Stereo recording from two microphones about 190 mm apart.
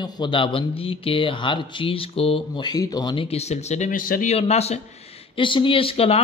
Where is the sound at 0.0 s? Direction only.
25° left (ahead or behind).